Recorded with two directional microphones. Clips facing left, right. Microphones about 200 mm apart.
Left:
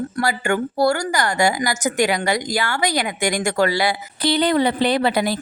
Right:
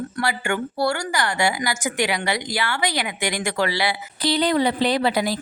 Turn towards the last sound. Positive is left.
turn(degrees=55)  # may be behind; listen again after turning